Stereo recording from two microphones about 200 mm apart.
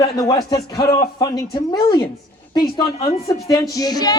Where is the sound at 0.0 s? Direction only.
15° left (ahead or behind).